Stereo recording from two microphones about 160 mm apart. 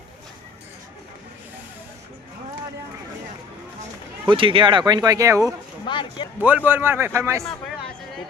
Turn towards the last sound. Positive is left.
turn(degrees=-15)  # may be behind; listen again after turning